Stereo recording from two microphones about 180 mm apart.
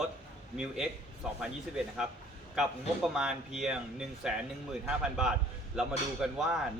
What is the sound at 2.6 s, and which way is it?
A man's voice, 5° right (ahead or behind).